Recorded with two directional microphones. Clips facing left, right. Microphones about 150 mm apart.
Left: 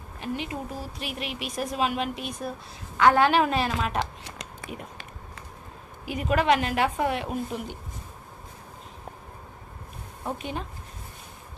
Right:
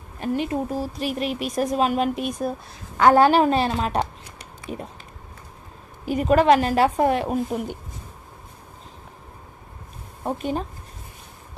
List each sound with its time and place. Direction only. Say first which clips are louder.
0.2 s a woman's voice: right 8 dB; 45° right (ahead or behind)
6.0 s speech: right 6 dB; 40° right (ahead or behind)
10.2 s speech: right 7 dB; 40° right (ahead or behind)